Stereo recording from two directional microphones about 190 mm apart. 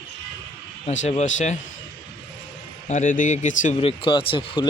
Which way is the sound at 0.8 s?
40° left (ahead or behind).